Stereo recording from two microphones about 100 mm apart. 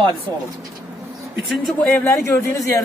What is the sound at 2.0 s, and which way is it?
Speech, 25° left (ahead or behind).